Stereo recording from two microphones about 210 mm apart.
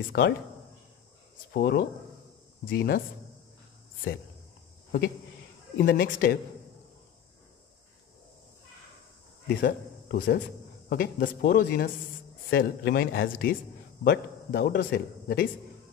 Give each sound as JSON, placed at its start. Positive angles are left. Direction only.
{"t": 0.1, "sound": "speech", "side_deg": 50}
{"t": 1.5, "sound": "speech", "side_deg": 45}
{"t": 5.8, "sound": "speech", "side_deg": 45}
{"t": 9.5, "sound": "speech", "side_deg": 45}